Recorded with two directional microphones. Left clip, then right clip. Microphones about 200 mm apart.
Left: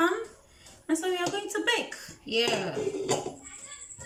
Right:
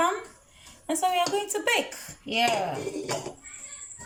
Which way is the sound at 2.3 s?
15° right (ahead or behind).